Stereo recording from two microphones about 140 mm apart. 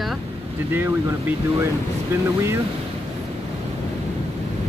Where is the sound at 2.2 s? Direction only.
20° right (ahead or behind).